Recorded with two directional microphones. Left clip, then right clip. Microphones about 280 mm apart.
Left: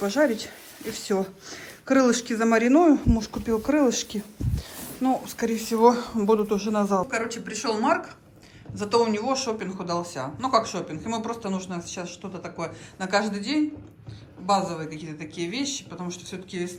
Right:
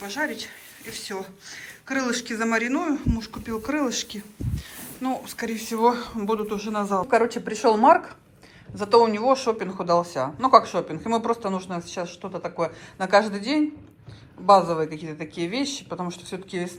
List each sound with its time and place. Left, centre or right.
0.0 s speech: left; by 13.6 s centre
14.7 s speech: centre